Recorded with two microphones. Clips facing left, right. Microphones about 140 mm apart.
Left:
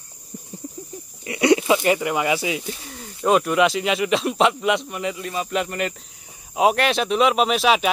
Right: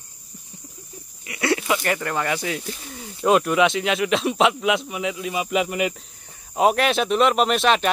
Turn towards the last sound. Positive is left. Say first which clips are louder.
# even
turn(degrees=5)  # may be behind; listen again after turning